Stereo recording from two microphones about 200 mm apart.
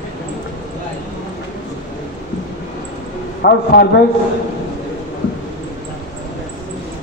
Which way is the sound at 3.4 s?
55° left (ahead or behind).